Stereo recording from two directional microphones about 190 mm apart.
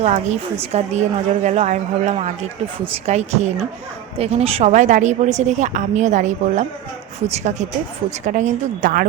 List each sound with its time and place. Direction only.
0.0 s a woman's voice: 35° right (ahead or behind)